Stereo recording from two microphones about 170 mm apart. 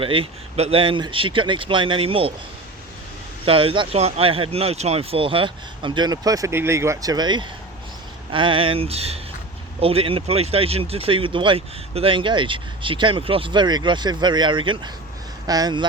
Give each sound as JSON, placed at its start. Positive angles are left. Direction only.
{"t": 0.0, "sound": "speech", "side_deg": -30}
{"t": 3.4, "sound": "speech", "side_deg": -30}